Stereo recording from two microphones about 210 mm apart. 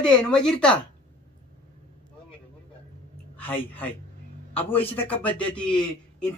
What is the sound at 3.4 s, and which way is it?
A woman's voice, 10° left (ahead or behind).